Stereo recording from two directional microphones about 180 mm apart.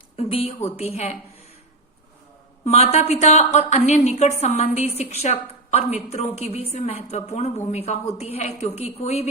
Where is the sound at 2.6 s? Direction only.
35° left (ahead or behind).